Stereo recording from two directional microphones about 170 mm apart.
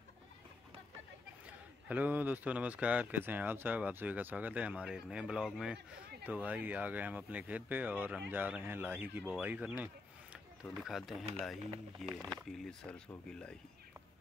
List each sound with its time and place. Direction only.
1.9 s speech: 10° right (ahead or behind)
12.2 s speech: 20° right (ahead or behind)
12.4 s speech: 5° left (ahead or behind)